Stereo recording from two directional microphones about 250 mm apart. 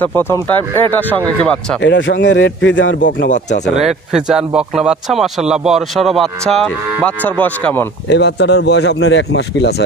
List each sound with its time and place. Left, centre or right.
0.0 s speech: centre
1.8 s speech: left
3.1 s speech: left
3.7 s speech: centre
8.1 s speech: left